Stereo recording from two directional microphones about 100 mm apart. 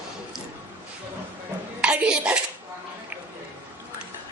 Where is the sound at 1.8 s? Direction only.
10° right (ahead or behind).